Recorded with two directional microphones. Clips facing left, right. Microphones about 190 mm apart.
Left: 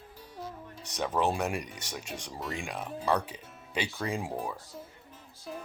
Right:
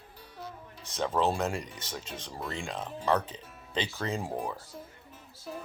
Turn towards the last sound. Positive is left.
turn(degrees=10)  # may be behind; listen again after turning